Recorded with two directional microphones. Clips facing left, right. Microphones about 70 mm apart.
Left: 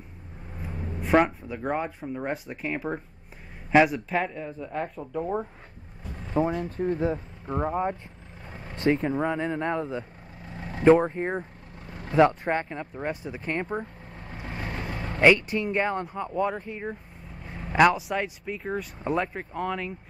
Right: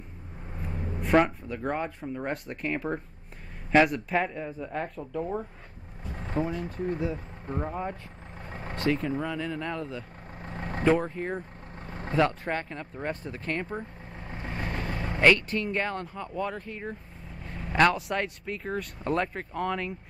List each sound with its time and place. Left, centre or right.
1.0 s speech: centre
5.1 s speech: left
6.3 s speech: left
10.4 s vehicle: right
10.8 s speech: left
11.8 s vehicle: right
12.2 s speech: left
14.5 s vehicle: centre
15.1 s speech: centre